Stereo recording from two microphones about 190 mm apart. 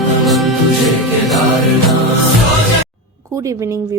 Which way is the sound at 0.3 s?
Centre (ahead or behind).